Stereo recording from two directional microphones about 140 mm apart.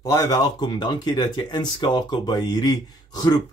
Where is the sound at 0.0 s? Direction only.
25° left (ahead or behind).